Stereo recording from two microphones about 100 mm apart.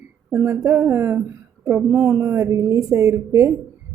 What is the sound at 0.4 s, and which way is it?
Speech, 30° right (ahead or behind).